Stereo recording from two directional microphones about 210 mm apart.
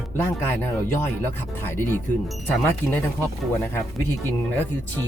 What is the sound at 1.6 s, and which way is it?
Speech, 10° left (ahead or behind).